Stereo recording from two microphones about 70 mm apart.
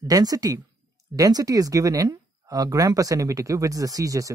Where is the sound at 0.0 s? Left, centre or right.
Right.